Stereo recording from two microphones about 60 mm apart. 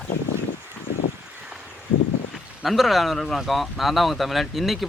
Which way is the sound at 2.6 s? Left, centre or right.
Centre.